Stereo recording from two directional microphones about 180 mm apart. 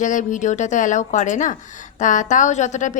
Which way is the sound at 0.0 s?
45° left (ahead or behind).